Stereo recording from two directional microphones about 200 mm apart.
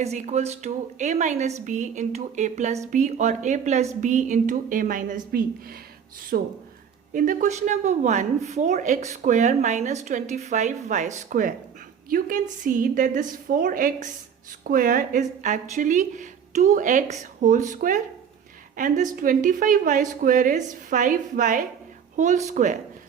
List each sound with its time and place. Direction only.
0.0 s a woman's voice: 35° right (ahead or behind); by 6.5 s 50° right (ahead or behind)
7.1 s a woman's voice: 40° right (ahead or behind)